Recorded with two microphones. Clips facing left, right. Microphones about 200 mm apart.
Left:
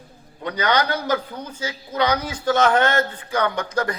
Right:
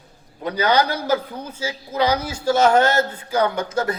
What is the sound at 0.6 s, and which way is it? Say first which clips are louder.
Speech: right 2 dB; 10° right (ahead or behind).